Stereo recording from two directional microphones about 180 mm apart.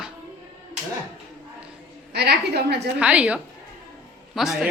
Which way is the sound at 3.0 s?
5° right (ahead or behind).